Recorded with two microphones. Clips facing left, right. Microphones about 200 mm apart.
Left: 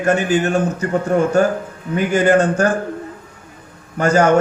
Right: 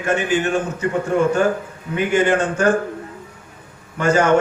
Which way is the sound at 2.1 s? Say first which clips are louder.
Left 4 dB; 40° left (ahead or behind).